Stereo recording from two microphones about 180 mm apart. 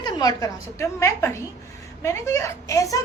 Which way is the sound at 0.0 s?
20° left (ahead or behind).